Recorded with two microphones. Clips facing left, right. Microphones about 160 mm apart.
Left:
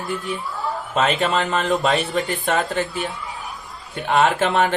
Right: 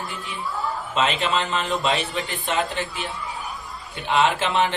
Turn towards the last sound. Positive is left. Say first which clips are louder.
# left 3 dB
turn(degrees=45)  # may be behind; listen again after turning